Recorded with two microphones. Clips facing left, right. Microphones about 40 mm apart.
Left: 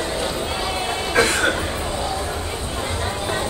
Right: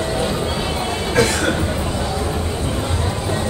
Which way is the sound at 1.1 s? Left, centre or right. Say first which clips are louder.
Even; left.